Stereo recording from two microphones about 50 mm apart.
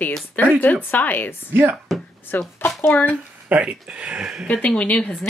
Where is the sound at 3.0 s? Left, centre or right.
Right.